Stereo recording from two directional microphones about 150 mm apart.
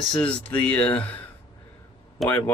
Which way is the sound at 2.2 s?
10° left (ahead or behind).